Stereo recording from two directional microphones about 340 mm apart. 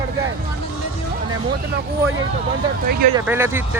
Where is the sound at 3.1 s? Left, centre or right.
Centre.